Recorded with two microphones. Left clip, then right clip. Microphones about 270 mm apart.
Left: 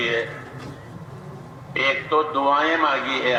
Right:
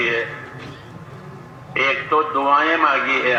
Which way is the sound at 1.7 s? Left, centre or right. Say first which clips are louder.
Right 2 dB; left.